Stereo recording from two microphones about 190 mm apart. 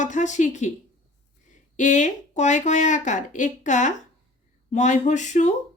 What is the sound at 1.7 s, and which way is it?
Speech, 40° left (ahead or behind).